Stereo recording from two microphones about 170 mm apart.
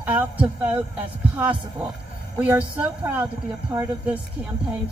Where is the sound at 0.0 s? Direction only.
10° right (ahead or behind).